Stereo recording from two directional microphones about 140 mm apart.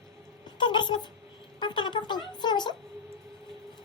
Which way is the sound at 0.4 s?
35° left (ahead or behind).